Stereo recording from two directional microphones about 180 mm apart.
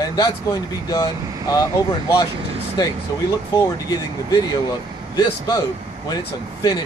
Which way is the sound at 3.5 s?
20° left (ahead or behind).